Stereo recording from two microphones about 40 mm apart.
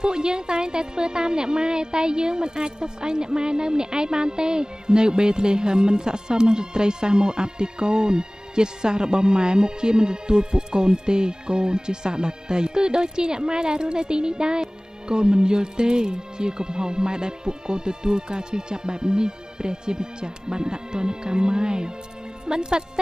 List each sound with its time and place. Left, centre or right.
0.0 s a woman's voice: right